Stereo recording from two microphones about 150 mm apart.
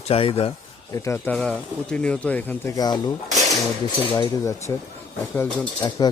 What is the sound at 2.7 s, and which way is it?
Speech, 25° left (ahead or behind).